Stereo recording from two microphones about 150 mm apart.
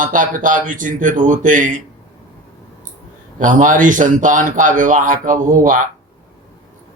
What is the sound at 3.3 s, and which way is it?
Speech, 60° right (ahead or behind).